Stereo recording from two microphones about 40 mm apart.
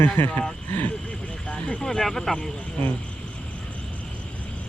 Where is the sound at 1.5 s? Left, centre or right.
Left.